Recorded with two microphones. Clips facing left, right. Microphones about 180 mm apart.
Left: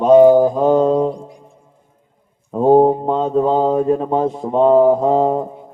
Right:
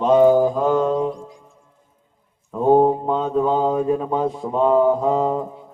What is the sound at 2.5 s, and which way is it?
Mantra, 30° left (ahead or behind).